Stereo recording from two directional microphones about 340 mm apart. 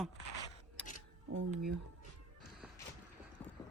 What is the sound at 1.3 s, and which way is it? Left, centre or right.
Speech, right.